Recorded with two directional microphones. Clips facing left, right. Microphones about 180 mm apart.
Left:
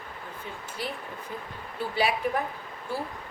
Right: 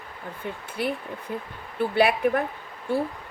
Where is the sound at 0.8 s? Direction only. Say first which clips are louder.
Right 7 dB; 60° right (ahead or behind).